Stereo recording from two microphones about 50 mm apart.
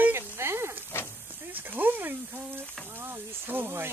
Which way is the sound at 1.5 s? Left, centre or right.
Right.